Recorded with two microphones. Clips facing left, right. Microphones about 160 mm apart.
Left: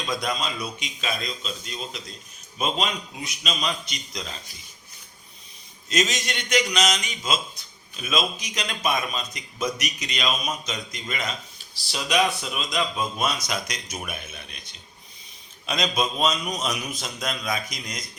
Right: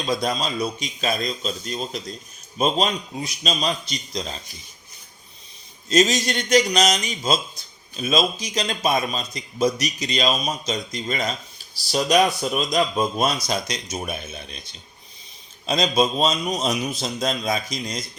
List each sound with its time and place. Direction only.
0.0 s a man's voice: 35° right (ahead or behind)
5.9 s a man's voice: 35° right (ahead or behind)
15.6 s a man's voice: 30° right (ahead or behind)